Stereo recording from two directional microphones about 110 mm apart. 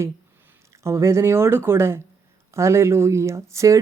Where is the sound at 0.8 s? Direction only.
25° right (ahead or behind).